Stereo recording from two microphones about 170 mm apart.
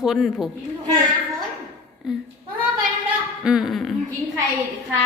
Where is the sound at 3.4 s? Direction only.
5° right (ahead or behind).